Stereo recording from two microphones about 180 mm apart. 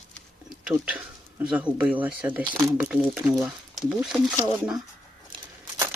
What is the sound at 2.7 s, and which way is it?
Speech, 5° right (ahead or behind).